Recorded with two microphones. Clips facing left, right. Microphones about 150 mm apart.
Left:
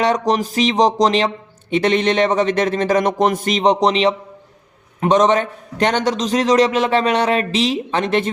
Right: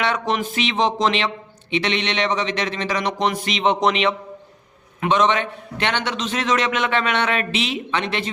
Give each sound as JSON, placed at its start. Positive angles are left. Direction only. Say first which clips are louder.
{"t": 0.0, "sound": "a man's voice", "louder": "left 5 dB", "side_deg": 40}
{"t": 1.7, "sound": "a sound", "louder": "left 7 dB", "side_deg": 45}
{"t": 4.9, "sound": "a man's voice", "louder": "left 5 dB", "side_deg": 40}